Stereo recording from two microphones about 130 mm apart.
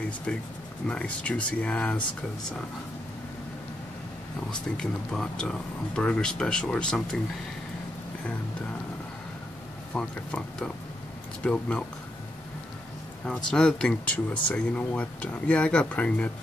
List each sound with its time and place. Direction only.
0.8 s speech: 10° left (ahead or behind)
4.5 s speech: 5° left (ahead or behind)
9.9 s speech: 5° left (ahead or behind)
13.3 s speech: 5° left (ahead or behind)